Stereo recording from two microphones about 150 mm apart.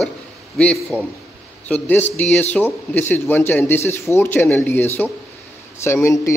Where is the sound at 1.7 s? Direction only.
10° left (ahead or behind).